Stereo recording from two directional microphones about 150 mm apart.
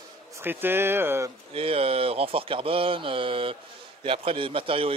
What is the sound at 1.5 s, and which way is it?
Speech, 40° right (ahead or behind).